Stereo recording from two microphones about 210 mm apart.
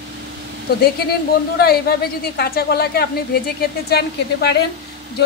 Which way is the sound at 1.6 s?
45° left (ahead or behind).